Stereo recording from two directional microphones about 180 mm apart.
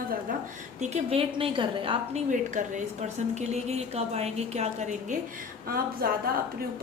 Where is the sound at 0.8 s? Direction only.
35° right (ahead or behind).